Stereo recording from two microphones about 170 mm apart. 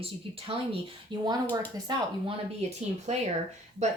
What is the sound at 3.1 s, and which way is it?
Speech, 40° right (ahead or behind).